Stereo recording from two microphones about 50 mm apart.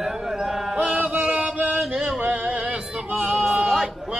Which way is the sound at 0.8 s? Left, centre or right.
Right.